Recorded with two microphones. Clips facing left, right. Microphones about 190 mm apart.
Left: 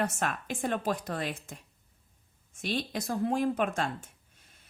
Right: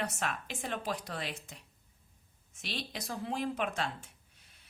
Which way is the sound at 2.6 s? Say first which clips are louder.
Left 8 dB; 50° left (ahead or behind).